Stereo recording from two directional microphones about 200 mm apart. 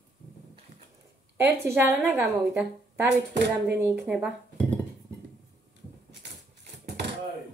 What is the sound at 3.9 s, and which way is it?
Speech, 5° right (ahead or behind).